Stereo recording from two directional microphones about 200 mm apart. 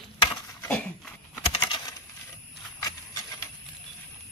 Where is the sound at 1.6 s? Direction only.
20° left (ahead or behind).